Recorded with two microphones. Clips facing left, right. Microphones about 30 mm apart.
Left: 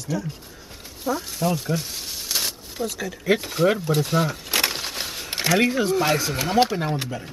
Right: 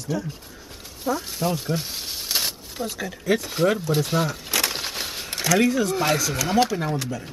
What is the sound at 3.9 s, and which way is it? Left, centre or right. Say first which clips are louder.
Speech: left 1 dB; centre.